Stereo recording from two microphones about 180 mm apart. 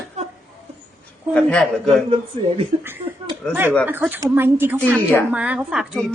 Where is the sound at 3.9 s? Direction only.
10° right (ahead or behind).